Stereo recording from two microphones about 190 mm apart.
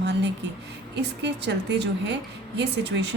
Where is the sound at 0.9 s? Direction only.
65° right (ahead or behind).